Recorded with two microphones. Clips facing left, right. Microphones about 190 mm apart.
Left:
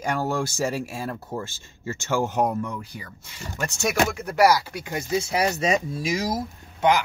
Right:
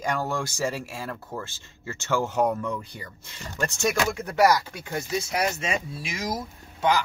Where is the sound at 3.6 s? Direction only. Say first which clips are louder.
Left 1 dB; 10° left (ahead or behind).